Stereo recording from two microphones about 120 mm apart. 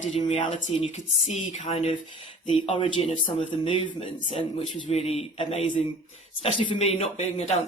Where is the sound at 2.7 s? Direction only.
40° left (ahead or behind).